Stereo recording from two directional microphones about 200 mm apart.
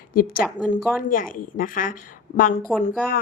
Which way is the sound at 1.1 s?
45° left (ahead or behind).